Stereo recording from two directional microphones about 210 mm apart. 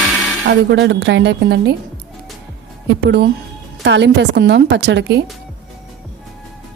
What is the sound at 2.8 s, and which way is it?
A woman's voice, 55° right (ahead or behind).